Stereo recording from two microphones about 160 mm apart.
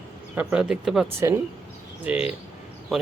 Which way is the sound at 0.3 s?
5° right (ahead or behind).